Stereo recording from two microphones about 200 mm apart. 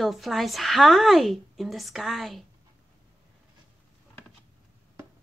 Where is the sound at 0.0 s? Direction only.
Centre (ahead or behind).